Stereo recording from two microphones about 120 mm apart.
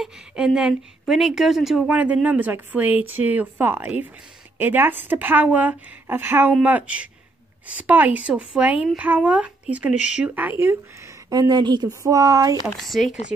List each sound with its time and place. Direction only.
0.0 s speech: 5° right (ahead or behind); by 10.8 s 20° right (ahead or behind)
11.2 s speech: 35° right (ahead or behind)
12.6 s speech: centre (ahead or behind)